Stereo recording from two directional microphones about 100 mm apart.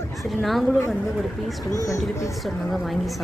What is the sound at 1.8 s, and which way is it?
Speech, 30° left (ahead or behind).